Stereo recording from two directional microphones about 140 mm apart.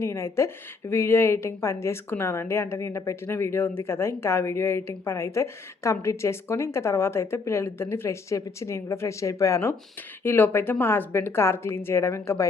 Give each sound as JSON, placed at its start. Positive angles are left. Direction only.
{"t": 0.0, "sound": "a woman's voice", "side_deg": 20}